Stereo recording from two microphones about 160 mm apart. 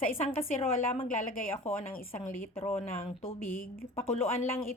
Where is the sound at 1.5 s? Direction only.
40° left (ahead or behind).